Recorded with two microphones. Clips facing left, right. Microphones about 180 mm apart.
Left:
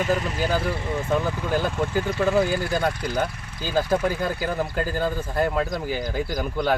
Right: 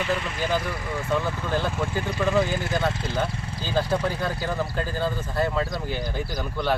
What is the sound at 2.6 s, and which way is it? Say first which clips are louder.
Speech: left 2 dB; 20° right (ahead or behind).